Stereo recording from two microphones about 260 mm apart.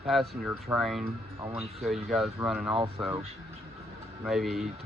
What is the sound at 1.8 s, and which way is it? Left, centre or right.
Speech, centre.